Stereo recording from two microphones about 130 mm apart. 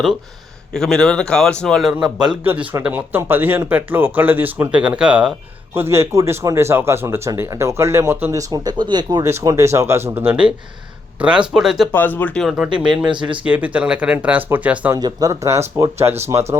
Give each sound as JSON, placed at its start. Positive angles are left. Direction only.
{"t": 0.7, "sound": "speech", "side_deg": 5}
{"t": 5.7, "sound": "speech", "side_deg": -20}
{"t": 11.9, "sound": "speech", "side_deg": 15}
{"t": 12.4, "sound": "speech", "side_deg": -5}
{"t": 14.9, "sound": "speech", "side_deg": -30}